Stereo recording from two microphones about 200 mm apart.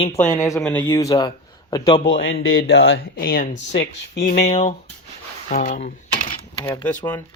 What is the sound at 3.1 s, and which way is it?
Speech, 45° left (ahead or behind).